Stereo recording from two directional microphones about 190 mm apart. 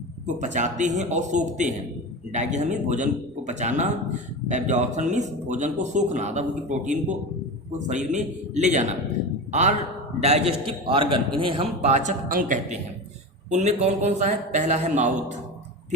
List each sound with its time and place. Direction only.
0.3 s speech: 40° right (ahead or behind)